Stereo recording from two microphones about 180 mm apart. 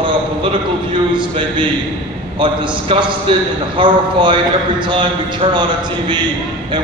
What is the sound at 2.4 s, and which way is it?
Speech, 25° right (ahead or behind).